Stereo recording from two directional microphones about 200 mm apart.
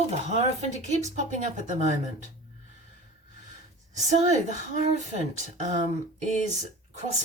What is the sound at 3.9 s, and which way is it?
Speech, 35° right (ahead or behind).